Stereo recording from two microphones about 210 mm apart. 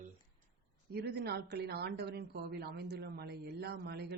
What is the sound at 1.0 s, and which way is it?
A woman's voice, 50° right (ahead or behind).